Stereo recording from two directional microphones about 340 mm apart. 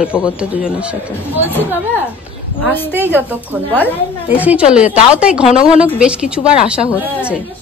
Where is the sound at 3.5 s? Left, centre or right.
Centre.